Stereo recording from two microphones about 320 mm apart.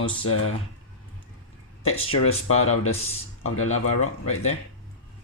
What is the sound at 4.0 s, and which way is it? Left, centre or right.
Speech, left.